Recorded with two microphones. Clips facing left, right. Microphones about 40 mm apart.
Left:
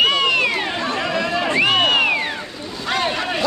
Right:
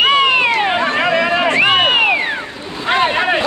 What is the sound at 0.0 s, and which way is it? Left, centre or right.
Cat, right.